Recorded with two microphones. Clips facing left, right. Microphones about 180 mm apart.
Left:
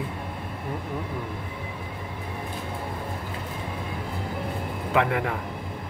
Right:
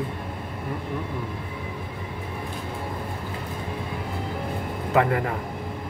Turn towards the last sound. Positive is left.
turn(degrees=0)  # may be behind; listen again after turning